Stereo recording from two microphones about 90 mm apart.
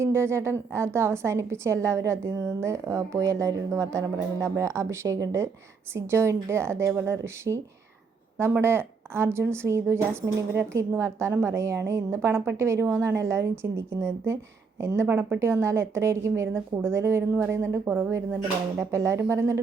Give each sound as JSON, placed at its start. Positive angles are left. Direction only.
{"t": 0.0, "sound": "a woman's voice", "side_deg": -30}